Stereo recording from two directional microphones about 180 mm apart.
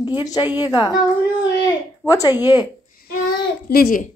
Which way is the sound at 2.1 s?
20° left (ahead or behind).